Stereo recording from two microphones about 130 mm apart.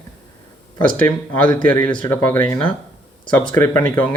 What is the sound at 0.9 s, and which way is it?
Speech, 10° left (ahead or behind).